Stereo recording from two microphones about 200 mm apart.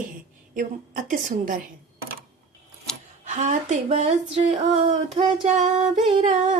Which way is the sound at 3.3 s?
40° right (ahead or behind).